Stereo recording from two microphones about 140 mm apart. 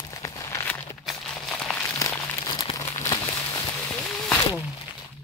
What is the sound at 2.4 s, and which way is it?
Crumpling, 30° left (ahead or behind).